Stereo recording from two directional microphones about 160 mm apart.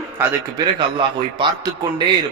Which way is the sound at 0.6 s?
30° right (ahead or behind).